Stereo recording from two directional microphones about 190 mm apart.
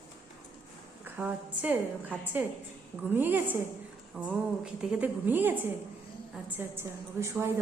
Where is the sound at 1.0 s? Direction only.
10° right (ahead or behind).